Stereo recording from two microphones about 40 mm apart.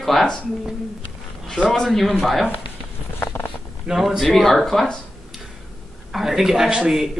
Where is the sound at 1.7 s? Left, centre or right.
Centre.